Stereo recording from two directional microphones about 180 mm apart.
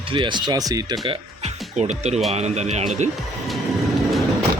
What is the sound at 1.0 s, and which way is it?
Speech, 35° right (ahead or behind).